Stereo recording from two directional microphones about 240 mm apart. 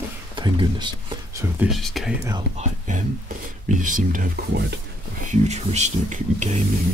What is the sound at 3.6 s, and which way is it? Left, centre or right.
Speech, right.